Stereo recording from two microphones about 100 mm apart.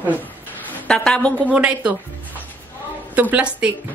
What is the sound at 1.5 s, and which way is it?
Speech, 15° right (ahead or behind).